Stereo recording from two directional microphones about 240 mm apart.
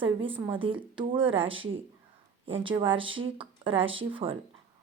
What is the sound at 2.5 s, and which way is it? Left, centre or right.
Speech, right.